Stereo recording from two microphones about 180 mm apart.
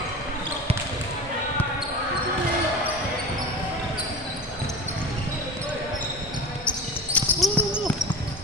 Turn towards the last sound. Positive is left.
turn(degrees=10)  # may be behind; listen again after turning